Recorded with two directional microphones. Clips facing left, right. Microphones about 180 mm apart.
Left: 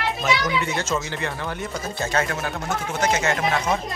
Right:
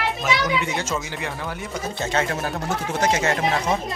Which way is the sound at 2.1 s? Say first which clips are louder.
Right 1 dB; 30° right (ahead or behind).